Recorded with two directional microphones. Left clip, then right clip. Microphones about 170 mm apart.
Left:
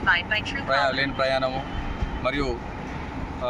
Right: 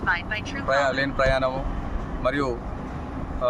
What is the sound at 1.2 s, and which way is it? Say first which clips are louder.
Speech: right 1 dB; 15° right (ahead or behind).